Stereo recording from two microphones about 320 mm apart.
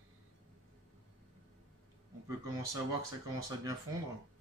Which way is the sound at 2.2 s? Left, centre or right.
Centre.